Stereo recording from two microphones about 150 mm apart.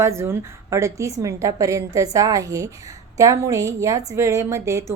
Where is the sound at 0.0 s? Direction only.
15° right (ahead or behind).